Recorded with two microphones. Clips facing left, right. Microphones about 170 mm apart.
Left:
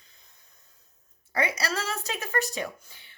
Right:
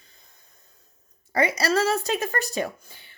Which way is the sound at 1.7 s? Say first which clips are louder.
Right 10 dB; 50° right (ahead or behind).